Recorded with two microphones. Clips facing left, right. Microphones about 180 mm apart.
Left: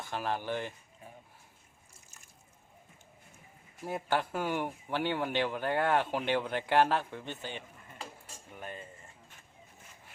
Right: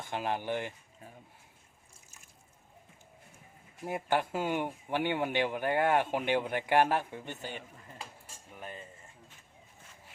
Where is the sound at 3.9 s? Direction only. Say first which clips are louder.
Right 1 dB; 15° right (ahead or behind).